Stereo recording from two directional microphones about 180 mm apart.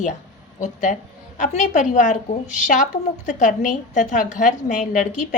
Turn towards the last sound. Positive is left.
turn(degrees=45)  # may be behind; listen again after turning